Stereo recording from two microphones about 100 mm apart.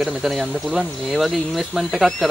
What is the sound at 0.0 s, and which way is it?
Speech, centre (ahead or behind).